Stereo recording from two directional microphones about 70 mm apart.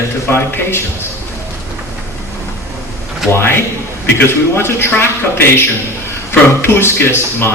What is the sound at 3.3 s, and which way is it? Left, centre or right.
Speech, left.